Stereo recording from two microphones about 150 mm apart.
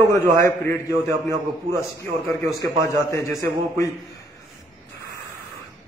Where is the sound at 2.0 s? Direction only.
20° left (ahead or behind).